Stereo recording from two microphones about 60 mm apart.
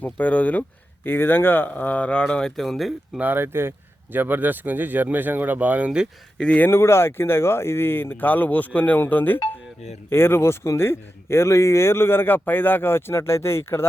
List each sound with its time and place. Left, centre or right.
0.0 s speech: left
1.0 s speech: left; by 2.9 s centre
3.2 s speech: right
6.4 s speech: left
6.7 s speech: left